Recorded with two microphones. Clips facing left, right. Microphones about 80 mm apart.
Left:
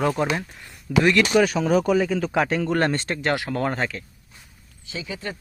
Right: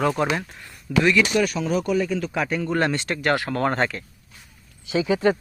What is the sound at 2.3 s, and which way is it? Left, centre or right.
Speech, left.